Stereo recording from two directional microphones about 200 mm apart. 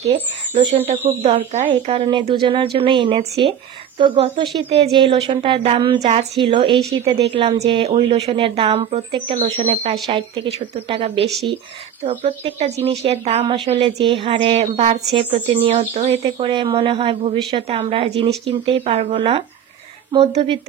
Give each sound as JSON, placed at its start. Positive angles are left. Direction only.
{"t": 0.0, "sound": "speech", "side_deg": -25}